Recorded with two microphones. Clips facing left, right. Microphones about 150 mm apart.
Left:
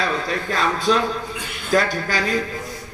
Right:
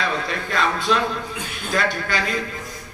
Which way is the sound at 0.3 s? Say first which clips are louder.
Left 1 dB; 35° left (ahead or behind).